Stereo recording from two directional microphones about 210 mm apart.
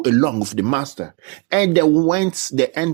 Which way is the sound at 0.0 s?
25° right (ahead or behind).